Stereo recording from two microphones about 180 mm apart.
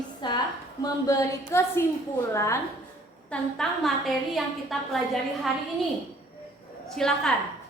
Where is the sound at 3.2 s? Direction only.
Centre (ahead or behind).